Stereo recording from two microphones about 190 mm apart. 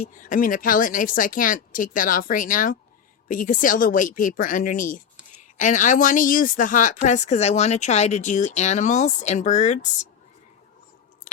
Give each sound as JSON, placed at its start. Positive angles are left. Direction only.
{"t": 0.0, "sound": "speech", "side_deg": 45}